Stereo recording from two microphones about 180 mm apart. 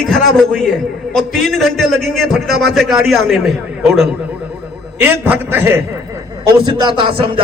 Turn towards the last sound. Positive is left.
turn(degrees=-30)  # may be behind; listen again after turning